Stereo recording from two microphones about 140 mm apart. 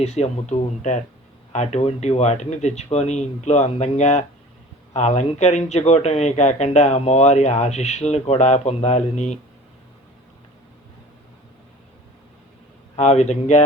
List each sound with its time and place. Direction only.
0.0 s speech: 50° left (ahead or behind)
13.0 s speech: 55° left (ahead or behind)